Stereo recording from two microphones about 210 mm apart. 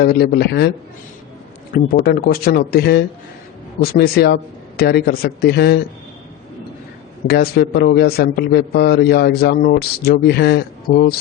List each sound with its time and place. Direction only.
0.0 s a man's voice: 45° left (ahead or behind)
2.0 s a man's voice: 45° left (ahead or behind)
7.3 s a man's voice: 50° left (ahead or behind)